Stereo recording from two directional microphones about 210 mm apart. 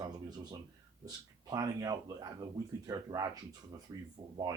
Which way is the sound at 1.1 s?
20° right (ahead or behind).